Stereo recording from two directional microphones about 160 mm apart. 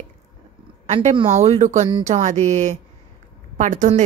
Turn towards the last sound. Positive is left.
turn(degrees=-50)  # may be behind; listen again after turning